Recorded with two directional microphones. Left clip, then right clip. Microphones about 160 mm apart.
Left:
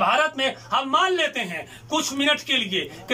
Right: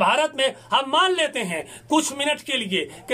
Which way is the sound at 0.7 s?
45° right (ahead or behind).